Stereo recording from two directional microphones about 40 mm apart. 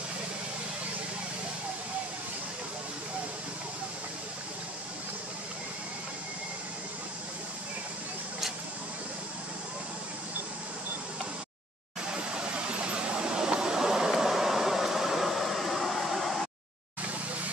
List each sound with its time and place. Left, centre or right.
12.4 s vehicle: right; by 16.4 s centre